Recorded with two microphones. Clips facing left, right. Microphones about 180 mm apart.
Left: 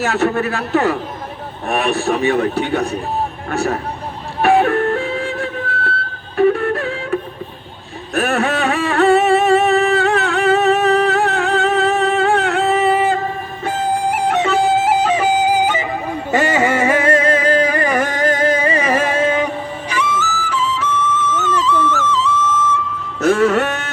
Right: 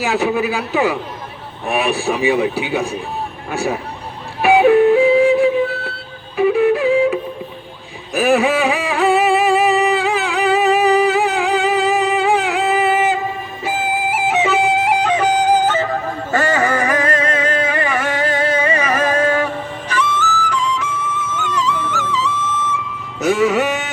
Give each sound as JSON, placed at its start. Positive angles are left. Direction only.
{"t": 0.0, "sound": "a man's voice", "side_deg": 0}
{"t": 4.4, "sound": "flute", "side_deg": 0}
{"t": 8.1, "sound": "music", "side_deg": 0}
{"t": 18.6, "sound": "music", "side_deg": 30}
{"t": 19.9, "sound": "music", "side_deg": 10}